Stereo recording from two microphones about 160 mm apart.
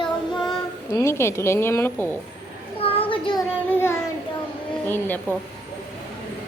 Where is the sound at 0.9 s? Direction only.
15° left (ahead or behind).